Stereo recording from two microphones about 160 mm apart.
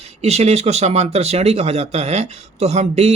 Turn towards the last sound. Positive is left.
turn(degrees=-40)  # may be behind; listen again after turning